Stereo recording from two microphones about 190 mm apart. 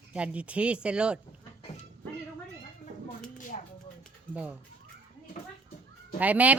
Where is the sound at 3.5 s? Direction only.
40° left (ahead or behind).